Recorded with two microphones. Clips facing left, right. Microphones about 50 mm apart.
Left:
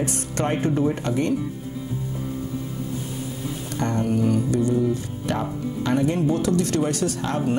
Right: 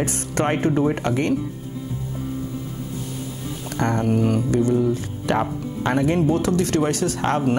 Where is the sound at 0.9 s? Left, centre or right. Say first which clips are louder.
Right 2 dB; right.